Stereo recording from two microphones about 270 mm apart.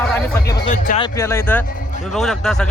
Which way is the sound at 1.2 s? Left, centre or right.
Centre.